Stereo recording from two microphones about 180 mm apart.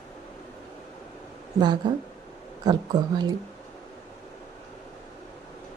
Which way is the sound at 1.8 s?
25° right (ahead or behind).